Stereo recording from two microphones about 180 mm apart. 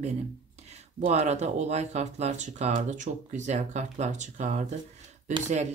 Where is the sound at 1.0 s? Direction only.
40° right (ahead or behind).